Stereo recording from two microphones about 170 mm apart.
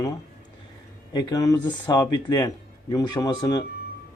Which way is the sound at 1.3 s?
20° left (ahead or behind).